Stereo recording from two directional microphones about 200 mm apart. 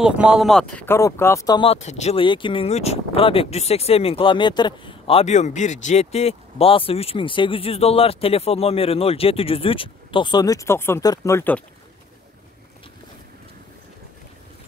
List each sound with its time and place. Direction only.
0.0 s speech: 5° right (ahead or behind)